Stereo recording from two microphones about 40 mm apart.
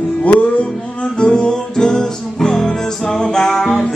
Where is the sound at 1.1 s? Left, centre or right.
Left.